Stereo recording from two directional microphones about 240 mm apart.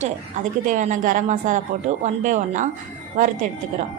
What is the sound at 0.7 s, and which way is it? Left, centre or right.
A woman's voice, right.